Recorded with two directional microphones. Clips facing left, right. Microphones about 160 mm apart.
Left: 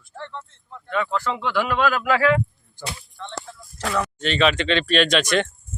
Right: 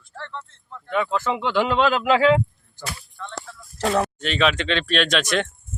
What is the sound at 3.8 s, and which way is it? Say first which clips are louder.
Speech: right 4 dB; 30° right (ahead or behind).